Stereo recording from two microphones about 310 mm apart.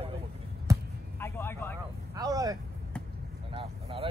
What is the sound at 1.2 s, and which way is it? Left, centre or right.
Speech, centre.